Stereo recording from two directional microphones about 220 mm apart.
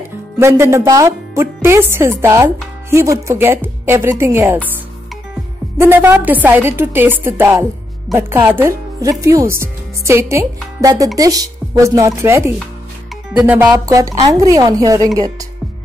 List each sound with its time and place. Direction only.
0.4 s speech: 10° right (ahead or behind)
5.8 s speech: 10° right (ahead or behind)